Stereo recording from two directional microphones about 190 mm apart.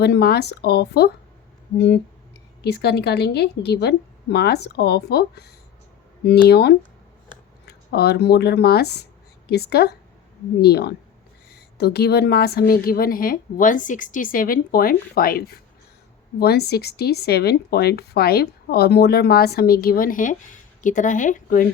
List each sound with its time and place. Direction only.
0.0 s speech: 55° left (ahead or behind)
2.7 s speech: 60° left (ahead or behind)
6.5 s a woman's voice: 60° left (ahead or behind); by 21.7 s 45° left (ahead or behind)